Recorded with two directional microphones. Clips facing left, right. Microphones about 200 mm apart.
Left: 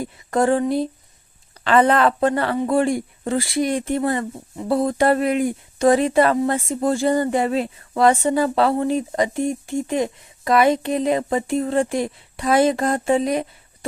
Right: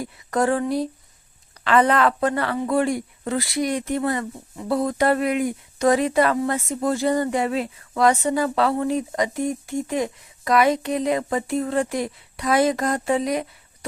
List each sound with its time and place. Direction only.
0.3 s speech: 30° left (ahead or behind)